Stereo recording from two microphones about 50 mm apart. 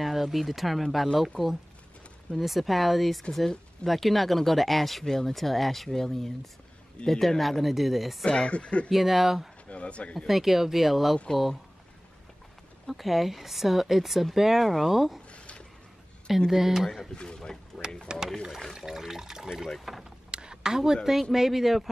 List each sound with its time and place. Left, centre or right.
0.0 s a man's voice: centre
2.3 s speech: centre
8.3 s speech: left
8.9 s speech: centre
9.7 s speech: left
10.2 s speech: centre
12.8 s speech: centre
15.3 s a sound: left
16.3 s speech: centre
17.1 s a man's voice: centre
18.1 s speech: centre
18.6 s speech: centre
20.2 s speech: centre